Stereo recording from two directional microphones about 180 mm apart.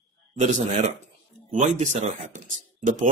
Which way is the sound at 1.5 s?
40° right (ahead or behind).